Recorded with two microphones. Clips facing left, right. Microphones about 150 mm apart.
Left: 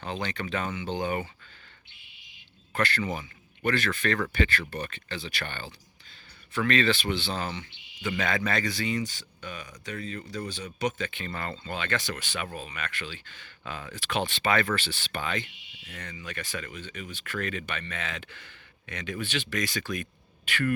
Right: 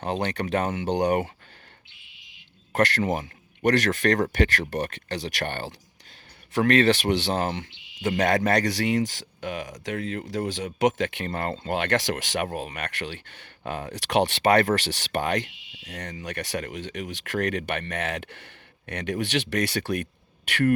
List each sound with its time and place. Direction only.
0.0 s speech: 60° right (ahead or behind)
0.4 s speech: 45° right (ahead or behind)
0.7 s speech: 70° right (ahead or behind)
2.8 s speech: 60° right (ahead or behind)
8.0 s speech: 45° right (ahead or behind)
8.4 s speech: 65° right (ahead or behind)
9.0 s speech: 85° right; by 10.2 s 65° right (ahead or behind)
10.3 s speech: 90° right; by 11.3 s 75° right (ahead or behind)
11.3 s speech: 50° right (ahead or behind)
11.6 s speech: 70° right (ahead or behind)
12.5 s speech: 55° right (ahead or behind)
13.9 s speech: 70° right (ahead or behind)
14.8 s speech: 75° right (ahead or behind)